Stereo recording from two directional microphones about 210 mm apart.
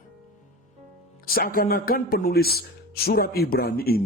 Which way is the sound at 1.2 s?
45° left (ahead or behind).